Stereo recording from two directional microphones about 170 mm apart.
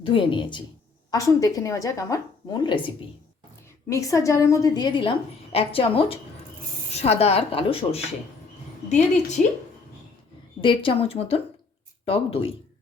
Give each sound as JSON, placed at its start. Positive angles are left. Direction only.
{"t": 0.0, "sound": "a woman's voice", "side_deg": 30}
{"t": 3.8, "sound": "a woman's voice", "side_deg": 20}
{"t": 9.4, "sound": "speech", "side_deg": 50}
{"t": 10.6, "sound": "a woman's voice", "side_deg": 30}